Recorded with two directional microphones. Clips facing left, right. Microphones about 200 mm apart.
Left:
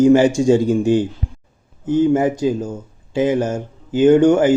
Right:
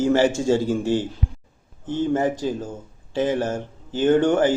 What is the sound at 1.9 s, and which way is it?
Speech, 10° left (ahead or behind).